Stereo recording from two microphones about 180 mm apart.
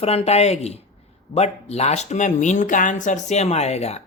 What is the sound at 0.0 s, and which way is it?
Speech, 35° left (ahead or behind).